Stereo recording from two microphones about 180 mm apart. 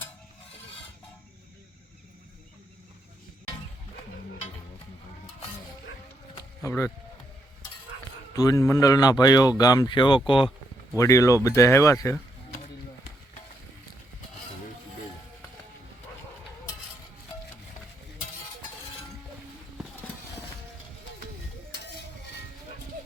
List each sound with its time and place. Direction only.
6.6 s speech: 15° left (ahead or behind)
8.4 s speech: 20° left (ahead or behind)
10.9 s speech: 15° left (ahead or behind)